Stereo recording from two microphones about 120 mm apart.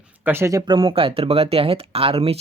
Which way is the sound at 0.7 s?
45° right (ahead or behind).